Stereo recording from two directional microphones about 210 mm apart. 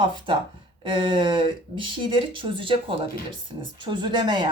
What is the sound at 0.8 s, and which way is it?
Speech, 20° right (ahead or behind).